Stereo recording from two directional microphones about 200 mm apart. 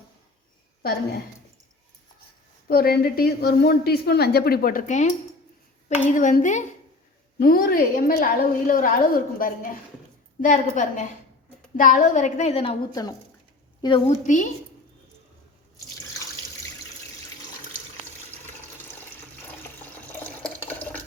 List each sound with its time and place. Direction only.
0.8 s a woman's voice: 50° left (ahead or behind)
2.6 s a woman's voice: 50° left (ahead or behind)
6.1 s a woman's voice: 40° left (ahead or behind)
7.3 s a woman's voice: 50° left (ahead or behind); by 14.2 s 25° left (ahead or behind)
14.3 s a woman's voice: 40° left (ahead or behind)
20.1 s water: 10° left (ahead or behind)